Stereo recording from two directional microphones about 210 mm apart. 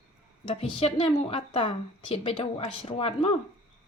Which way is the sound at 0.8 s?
25° left (ahead or behind).